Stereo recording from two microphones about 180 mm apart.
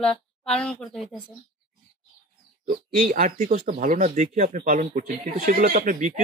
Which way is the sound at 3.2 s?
40° right (ahead or behind).